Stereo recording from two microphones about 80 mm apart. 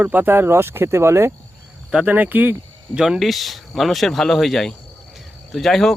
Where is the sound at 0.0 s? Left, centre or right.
Right.